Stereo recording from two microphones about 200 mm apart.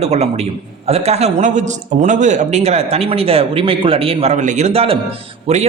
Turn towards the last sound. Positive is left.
turn(degrees=-30)  # may be behind; listen again after turning